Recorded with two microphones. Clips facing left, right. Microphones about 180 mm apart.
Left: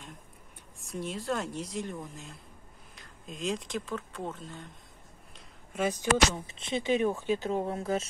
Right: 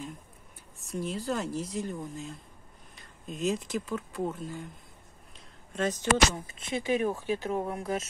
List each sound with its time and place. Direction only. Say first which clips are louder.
0.7 s speech: right 2 dB; centre (ahead or behind)
5.7 s speech: even; 10° left (ahead or behind)
6.4 s speech: left 1 dB; 25° left (ahead or behind)